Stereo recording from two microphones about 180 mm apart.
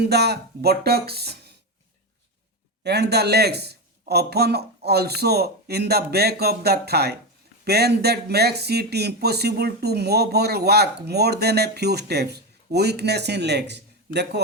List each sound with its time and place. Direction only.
0.0 s speech: 65° right (ahead or behind)
2.8 s speech: 65° right (ahead or behind)